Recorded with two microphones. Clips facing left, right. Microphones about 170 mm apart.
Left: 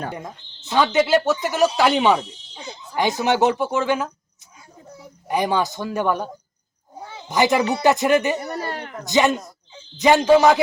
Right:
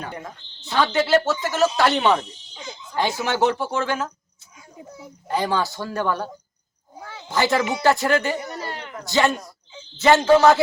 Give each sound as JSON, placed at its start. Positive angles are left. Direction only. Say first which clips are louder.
{"t": 0.1, "sound": "speech", "louder": "left 2 dB", "side_deg": 15}
{"t": 5.3, "sound": "speech", "louder": "left 2 dB", "side_deg": 15}
{"t": 7.0, "sound": "cat", "louder": "left 3 dB", "side_deg": 20}
{"t": 7.8, "sound": "speech", "louder": "left 2 dB", "side_deg": 20}
{"t": 8.4, "sound": "a sound", "louder": "left 3 dB", "side_deg": 40}
{"t": 9.0, "sound": "speech", "louder": "left 2 dB", "side_deg": 20}